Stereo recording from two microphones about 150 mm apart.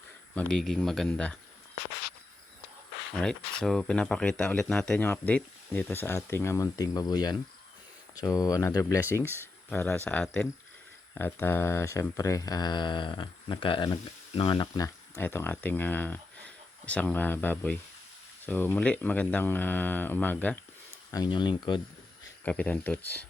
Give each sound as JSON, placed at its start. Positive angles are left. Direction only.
{"t": 0.3, "sound": "speech", "side_deg": 5}
{"t": 3.2, "sound": "speech", "side_deg": 5}
{"t": 21.1, "sound": "speech", "side_deg": 30}
{"t": 22.4, "sound": "speech", "side_deg": 10}